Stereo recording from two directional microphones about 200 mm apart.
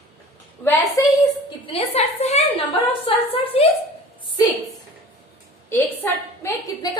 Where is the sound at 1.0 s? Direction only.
15° left (ahead or behind).